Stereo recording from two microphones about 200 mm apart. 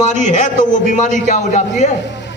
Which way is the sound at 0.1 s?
35° left (ahead or behind).